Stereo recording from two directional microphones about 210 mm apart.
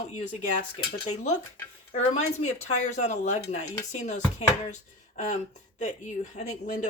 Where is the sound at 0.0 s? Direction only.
35° left (ahead or behind).